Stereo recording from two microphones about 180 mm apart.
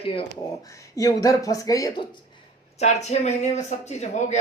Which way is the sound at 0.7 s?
15° left (ahead or behind).